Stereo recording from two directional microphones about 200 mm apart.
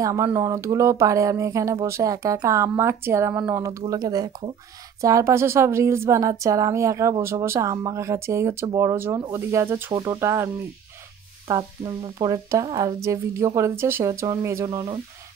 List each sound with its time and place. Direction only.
0.0 s a woman's voice: 15° right (ahead or behind)